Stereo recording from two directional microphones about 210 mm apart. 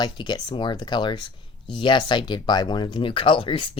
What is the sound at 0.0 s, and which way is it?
Speech, 20° left (ahead or behind).